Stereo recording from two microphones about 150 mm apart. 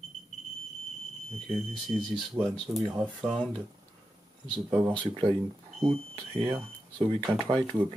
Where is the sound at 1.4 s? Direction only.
Centre (ahead or behind).